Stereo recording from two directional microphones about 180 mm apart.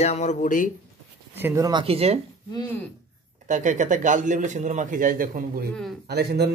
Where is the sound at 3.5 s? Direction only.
45° right (ahead or behind).